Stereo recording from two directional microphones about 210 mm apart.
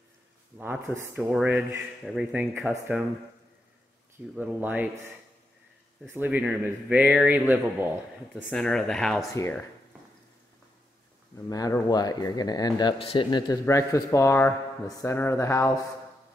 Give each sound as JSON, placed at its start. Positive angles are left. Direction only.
{"t": 0.6, "sound": "speech", "side_deg": -10}
{"t": 4.4, "sound": "speech", "side_deg": -10}
{"t": 8.4, "sound": "speech", "side_deg": 5}
{"t": 11.4, "sound": "speech", "side_deg": 15}